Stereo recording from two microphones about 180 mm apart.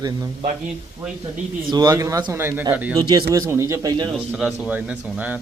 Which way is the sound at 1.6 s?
20° right (ahead or behind).